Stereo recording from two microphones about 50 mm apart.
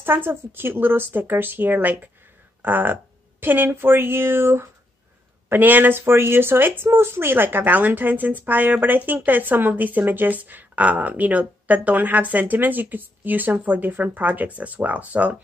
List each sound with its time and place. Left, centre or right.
0.0 s a woman's voice: right
5.5 s a woman's voice: right